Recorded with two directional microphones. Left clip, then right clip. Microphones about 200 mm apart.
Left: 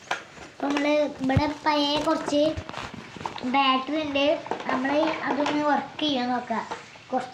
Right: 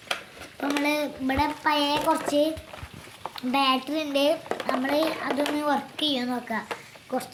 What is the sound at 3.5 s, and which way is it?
A child's voice, 70° right (ahead or behind).